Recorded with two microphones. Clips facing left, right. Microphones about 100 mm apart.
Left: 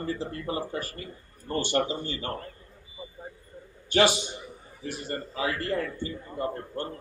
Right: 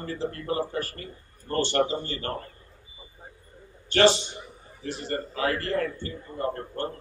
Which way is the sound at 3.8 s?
10° left (ahead or behind).